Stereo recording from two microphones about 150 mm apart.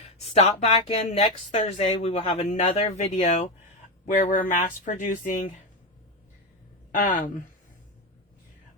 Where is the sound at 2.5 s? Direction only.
55° left (ahead or behind).